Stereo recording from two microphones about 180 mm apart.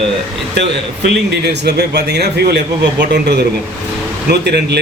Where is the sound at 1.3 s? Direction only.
65° right (ahead or behind).